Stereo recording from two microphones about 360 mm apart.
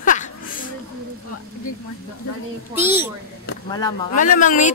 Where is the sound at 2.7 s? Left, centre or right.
Centre.